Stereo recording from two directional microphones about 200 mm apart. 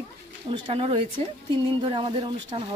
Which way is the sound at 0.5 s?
25° right (ahead or behind).